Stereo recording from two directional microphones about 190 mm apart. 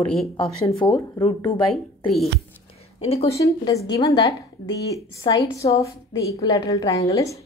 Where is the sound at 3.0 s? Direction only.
35° left (ahead or behind).